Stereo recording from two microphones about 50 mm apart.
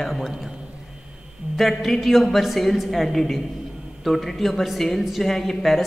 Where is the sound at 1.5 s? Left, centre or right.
Centre.